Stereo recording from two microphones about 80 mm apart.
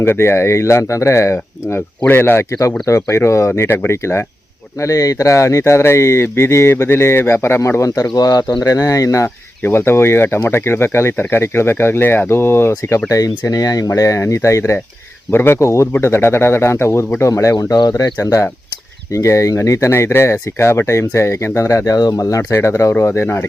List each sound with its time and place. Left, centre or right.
0.0 s speech: left
9.6 s speech: left
13.1 s speech: left